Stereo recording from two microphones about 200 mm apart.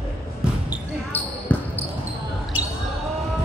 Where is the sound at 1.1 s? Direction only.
10° left (ahead or behind).